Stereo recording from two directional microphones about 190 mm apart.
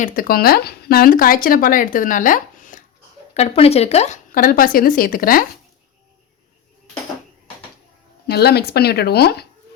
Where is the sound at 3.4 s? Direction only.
35° left (ahead or behind); by 5.4 s 50° left (ahead or behind).